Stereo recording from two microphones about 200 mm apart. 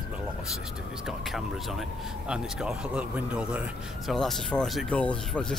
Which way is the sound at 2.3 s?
5° right (ahead or behind).